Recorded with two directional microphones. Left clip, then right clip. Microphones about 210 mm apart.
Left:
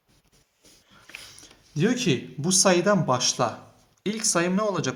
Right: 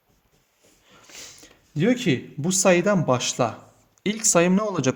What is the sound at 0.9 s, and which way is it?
Speech, 50° right (ahead or behind).